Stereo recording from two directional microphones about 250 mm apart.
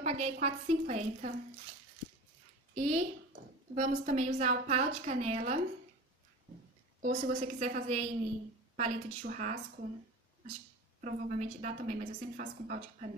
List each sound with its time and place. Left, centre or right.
0.0 s a woman's voice: right
2.7 s a woman's voice: right
7.0 s a woman's voice: right
11.0 s a woman's voice: right